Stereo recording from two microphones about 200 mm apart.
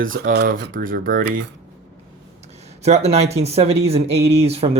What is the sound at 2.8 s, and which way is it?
Speech, 35° right (ahead or behind).